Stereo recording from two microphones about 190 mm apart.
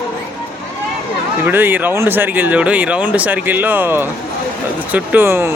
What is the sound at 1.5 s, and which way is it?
Speech, 10° right (ahead or behind).